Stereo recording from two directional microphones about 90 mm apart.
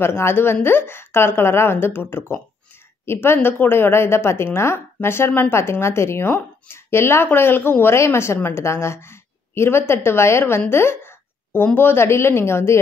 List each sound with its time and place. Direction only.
0.0 s a woman's voice: 30° left (ahead or behind)